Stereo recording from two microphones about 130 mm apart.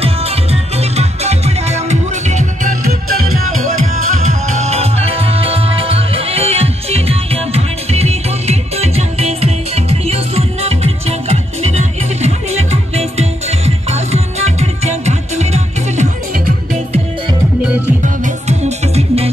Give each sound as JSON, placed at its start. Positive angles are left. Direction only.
{"t": 0.0, "sound": "music", "side_deg": -50}
{"t": 3.8, "sound": "music", "side_deg": -70}
{"t": 18.2, "sound": "music", "side_deg": -60}